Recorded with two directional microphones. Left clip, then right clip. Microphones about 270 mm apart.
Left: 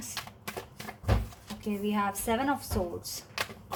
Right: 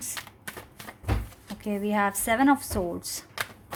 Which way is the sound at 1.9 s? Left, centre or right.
Right.